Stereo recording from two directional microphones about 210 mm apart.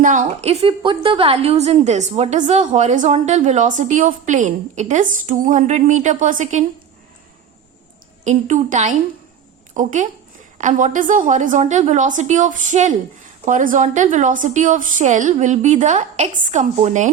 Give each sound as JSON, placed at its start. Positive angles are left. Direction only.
{"t": 0.0, "sound": "a woman's voice", "side_deg": -40}
{"t": 8.2, "sound": "a woman's voice", "side_deg": -35}